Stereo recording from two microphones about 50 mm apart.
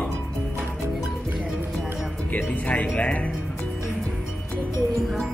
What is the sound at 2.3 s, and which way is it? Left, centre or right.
Speech, left.